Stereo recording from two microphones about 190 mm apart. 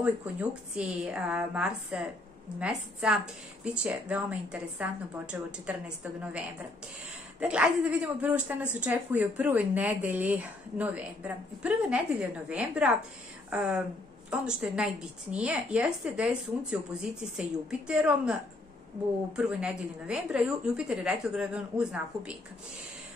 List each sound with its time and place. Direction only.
0.0 s a woman's voice: 5° right (ahead or behind)
7.3 s a woman's voice: 5° right (ahead or behind)